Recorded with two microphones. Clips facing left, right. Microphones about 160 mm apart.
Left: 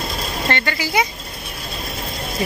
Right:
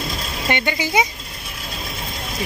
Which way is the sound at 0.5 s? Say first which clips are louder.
Right 2 dB; 15° right (ahead or behind).